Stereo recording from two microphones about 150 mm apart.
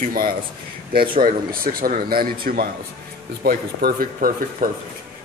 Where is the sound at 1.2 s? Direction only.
75° right (ahead or behind).